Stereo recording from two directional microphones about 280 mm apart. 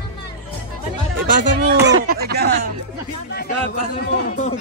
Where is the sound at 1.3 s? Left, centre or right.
Right.